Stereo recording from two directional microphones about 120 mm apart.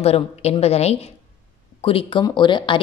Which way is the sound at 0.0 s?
60° left (ahead or behind).